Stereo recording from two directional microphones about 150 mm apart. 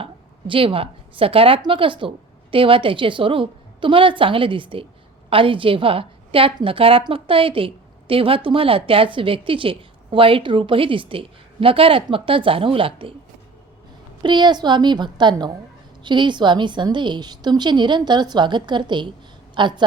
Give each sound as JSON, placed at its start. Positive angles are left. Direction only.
{"t": 0.0, "sound": "a woman's voice", "side_deg": -35}
{"t": 14.2, "sound": "a woman's voice", "side_deg": -30}